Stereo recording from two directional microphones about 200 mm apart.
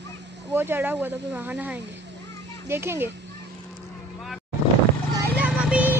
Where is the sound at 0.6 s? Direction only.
10° right (ahead or behind).